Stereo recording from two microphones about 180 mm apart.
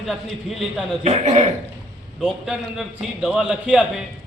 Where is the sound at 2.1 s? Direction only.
5° right (ahead or behind).